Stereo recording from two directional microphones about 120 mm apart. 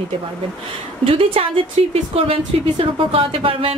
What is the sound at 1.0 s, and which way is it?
A woman's voice, 50° right (ahead or behind).